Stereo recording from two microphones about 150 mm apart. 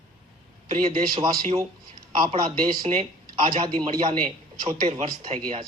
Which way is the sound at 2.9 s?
50° right (ahead or behind).